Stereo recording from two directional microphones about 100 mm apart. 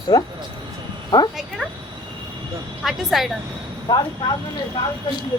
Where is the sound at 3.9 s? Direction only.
45° left (ahead or behind).